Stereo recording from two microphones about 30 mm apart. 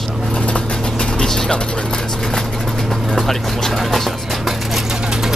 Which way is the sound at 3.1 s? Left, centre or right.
Centre.